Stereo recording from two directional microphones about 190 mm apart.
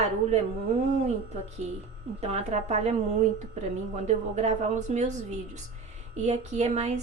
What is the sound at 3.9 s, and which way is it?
A woman's voice, 35° right (ahead or behind).